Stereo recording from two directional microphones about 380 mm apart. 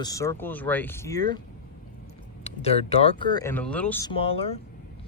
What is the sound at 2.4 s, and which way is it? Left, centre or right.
Speech, centre.